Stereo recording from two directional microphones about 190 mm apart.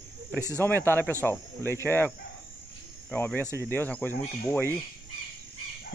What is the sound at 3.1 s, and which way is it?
Speech, 10° left (ahead or behind).